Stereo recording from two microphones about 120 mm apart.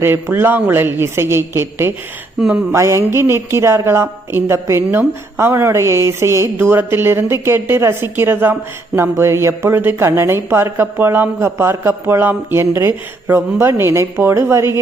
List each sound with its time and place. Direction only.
0.0 s speech: 20° right (ahead or behind)